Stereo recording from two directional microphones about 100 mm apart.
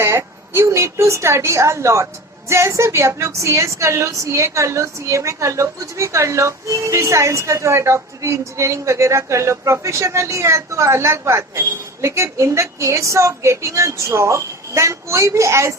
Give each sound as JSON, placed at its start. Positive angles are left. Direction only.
{"t": 0.0, "sound": "a woman's voice", "side_deg": -25}